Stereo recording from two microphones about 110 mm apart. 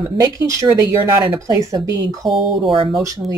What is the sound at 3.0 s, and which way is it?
Speech, 30° right (ahead or behind).